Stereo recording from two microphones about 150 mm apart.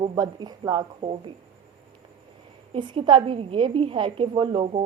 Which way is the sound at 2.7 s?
35° right (ahead or behind).